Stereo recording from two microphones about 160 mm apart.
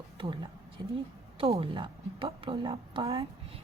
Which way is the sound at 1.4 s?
35° right (ahead or behind).